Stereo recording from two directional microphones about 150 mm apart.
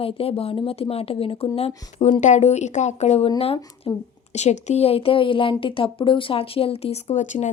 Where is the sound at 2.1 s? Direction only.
55° left (ahead or behind); by 4.0 s 30° left (ahead or behind).